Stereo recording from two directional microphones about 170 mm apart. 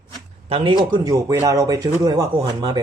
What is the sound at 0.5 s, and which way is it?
Speech, 30° right (ahead or behind).